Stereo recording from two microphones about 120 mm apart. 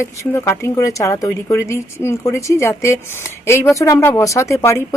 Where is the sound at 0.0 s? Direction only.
20° left (ahead or behind).